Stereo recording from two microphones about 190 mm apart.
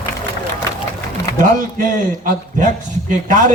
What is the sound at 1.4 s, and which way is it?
A man's voice, 45° right (ahead or behind).